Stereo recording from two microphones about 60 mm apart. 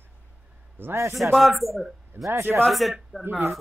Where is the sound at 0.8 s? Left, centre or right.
Right.